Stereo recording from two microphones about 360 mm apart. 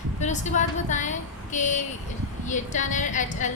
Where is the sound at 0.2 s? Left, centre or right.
Centre.